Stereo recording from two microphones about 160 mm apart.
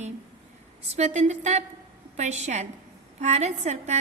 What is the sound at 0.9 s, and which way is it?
A woman's voice, 45° right (ahead or behind).